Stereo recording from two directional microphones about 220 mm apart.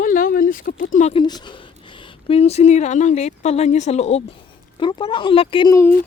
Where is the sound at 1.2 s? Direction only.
20° left (ahead or behind).